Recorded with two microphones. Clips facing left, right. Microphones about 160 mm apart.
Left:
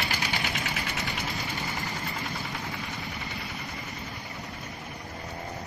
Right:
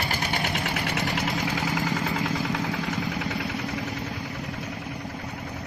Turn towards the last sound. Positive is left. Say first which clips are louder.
# right 8 dB
turn(degrees=-85)